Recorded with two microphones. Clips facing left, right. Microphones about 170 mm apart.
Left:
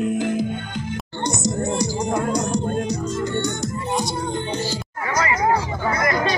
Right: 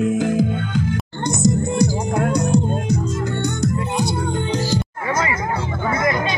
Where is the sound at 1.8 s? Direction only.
55° right (ahead or behind).